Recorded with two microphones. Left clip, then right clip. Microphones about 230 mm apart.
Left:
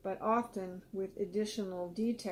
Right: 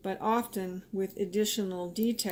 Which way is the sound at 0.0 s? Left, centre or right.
Right.